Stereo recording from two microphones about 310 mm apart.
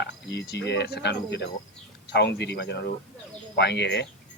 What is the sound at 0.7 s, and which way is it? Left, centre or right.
Speech, left.